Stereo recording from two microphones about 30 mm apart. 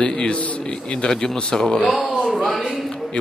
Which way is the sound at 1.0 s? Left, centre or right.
Left.